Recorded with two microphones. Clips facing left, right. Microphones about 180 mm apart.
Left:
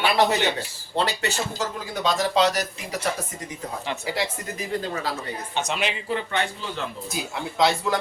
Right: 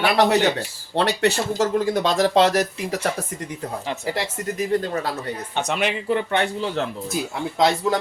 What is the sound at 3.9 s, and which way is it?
Speech, 45° right (ahead or behind).